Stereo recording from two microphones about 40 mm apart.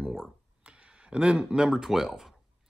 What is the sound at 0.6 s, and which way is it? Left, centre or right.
Speech, right.